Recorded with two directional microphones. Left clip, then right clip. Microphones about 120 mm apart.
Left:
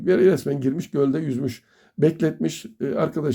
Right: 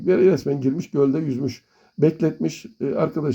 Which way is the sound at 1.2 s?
45° left (ahead or behind).